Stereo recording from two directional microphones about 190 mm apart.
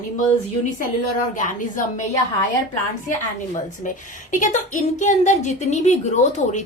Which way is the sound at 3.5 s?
40° left (ahead or behind).